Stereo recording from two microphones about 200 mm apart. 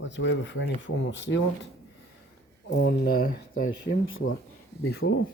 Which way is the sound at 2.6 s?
55° left (ahead or behind).